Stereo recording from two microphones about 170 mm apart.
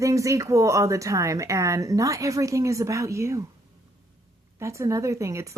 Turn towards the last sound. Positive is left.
turn(degrees=-20)  # may be behind; listen again after turning